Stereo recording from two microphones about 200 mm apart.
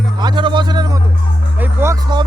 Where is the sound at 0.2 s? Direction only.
20° right (ahead or behind).